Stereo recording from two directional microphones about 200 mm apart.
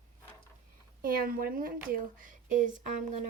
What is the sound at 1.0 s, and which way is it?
Speech, 45° right (ahead or behind).